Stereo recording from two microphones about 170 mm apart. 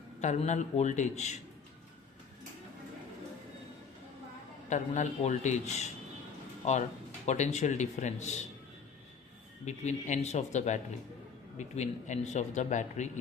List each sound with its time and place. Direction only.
0.2 s speech: 45° left (ahead or behind)
4.7 s speech: 45° left (ahead or behind)
7.3 s speech: 45° left (ahead or behind)
9.6 s speech: 45° left (ahead or behind)